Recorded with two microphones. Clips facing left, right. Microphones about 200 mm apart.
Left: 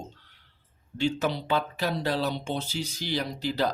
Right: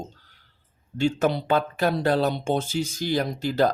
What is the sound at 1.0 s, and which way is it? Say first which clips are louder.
Speech: right 5 dB; 50° right (ahead or behind).